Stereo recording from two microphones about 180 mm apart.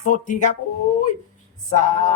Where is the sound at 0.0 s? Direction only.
45° left (ahead or behind).